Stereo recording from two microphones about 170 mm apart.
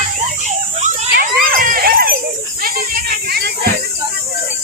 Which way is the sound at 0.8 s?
50° right (ahead or behind).